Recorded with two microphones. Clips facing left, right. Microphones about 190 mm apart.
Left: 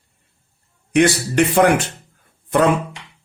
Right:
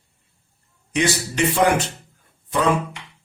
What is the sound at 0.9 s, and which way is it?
Speech, 60° left (ahead or behind).